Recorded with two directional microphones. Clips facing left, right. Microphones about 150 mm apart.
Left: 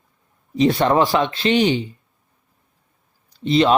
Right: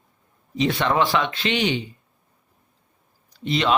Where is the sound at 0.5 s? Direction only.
40° left (ahead or behind).